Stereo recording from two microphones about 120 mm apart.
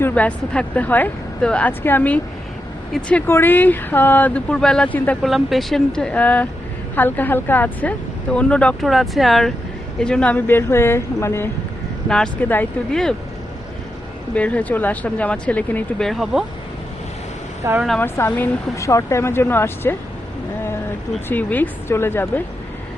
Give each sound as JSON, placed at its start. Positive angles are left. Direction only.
{"t": 0.0, "sound": "speech", "side_deg": 10}
{"t": 5.2, "sound": "speech", "side_deg": 0}
{"t": 12.0, "sound": "speech", "side_deg": 5}
{"t": 12.5, "sound": "speech", "side_deg": 15}
{"t": 14.3, "sound": "speech", "side_deg": 10}
{"t": 17.7, "sound": "speech", "side_deg": 0}
{"t": 18.0, "sound": "speech", "side_deg": 20}
{"t": 21.2, "sound": "speech", "side_deg": 15}